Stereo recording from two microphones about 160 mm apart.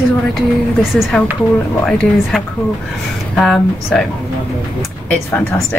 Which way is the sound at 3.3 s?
5° left (ahead or behind).